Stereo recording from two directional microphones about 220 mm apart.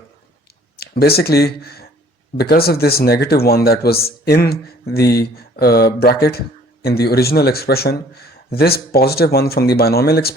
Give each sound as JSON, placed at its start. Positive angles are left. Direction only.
{"t": 0.8, "sound": "speech", "side_deg": 45}